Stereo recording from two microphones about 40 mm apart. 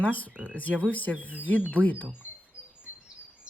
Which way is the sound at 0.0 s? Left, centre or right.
Left.